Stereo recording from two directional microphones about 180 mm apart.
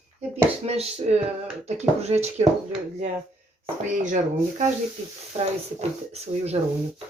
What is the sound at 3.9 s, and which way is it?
Speech, 45° right (ahead or behind).